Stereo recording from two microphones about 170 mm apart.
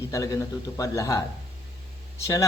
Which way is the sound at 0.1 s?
20° left (ahead or behind).